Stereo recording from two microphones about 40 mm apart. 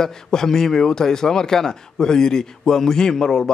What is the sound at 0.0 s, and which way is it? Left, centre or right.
A man's voice, centre.